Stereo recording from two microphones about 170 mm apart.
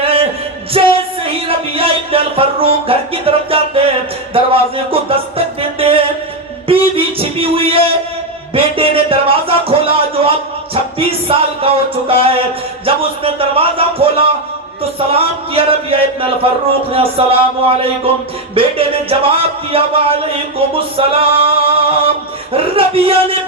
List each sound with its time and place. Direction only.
0.0 s music: 35° right (ahead or behind)
4.4 s speech: 35° right (ahead or behind)
5.5 s music: 35° right (ahead or behind)
8.5 s speech: 35° right (ahead or behind)
18.5 s speech: 35° right (ahead or behind)